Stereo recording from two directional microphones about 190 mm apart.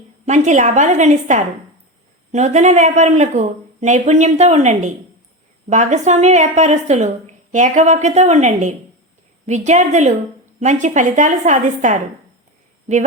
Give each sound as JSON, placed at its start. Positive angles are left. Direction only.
{"t": 0.3, "sound": "speech", "side_deg": -40}